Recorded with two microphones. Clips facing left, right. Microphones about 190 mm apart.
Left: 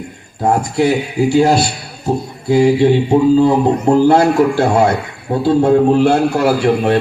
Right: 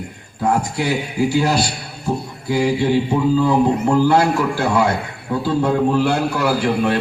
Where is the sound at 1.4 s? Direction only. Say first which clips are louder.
Left 8 dB; 25° left (ahead or behind).